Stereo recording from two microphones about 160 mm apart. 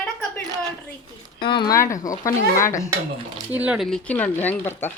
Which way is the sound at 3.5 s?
10° right (ahead or behind).